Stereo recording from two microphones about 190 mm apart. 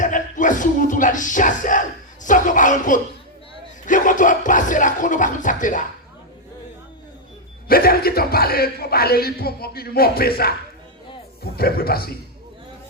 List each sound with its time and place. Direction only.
0.0 s music: 40° left (ahead or behind)
2.2 s speech: 45° left (ahead or behind)
7.7 s speech: 50° left (ahead or behind)
11.5 s speech: 55° left (ahead or behind)